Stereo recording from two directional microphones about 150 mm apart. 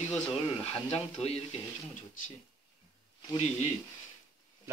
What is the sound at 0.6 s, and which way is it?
Speech, 45° left (ahead or behind).